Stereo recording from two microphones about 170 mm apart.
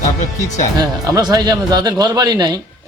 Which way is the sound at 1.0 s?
20° right (ahead or behind).